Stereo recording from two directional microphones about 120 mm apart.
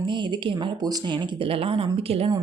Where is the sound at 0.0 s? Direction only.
40° right (ahead or behind).